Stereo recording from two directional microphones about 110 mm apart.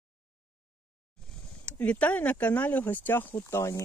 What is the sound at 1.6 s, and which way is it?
Speech, 10° left (ahead or behind).